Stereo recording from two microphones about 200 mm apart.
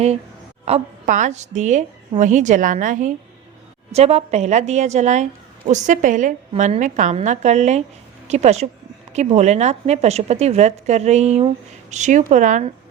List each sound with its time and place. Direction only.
0.6 s a woman's voice: 35° right (ahead or behind)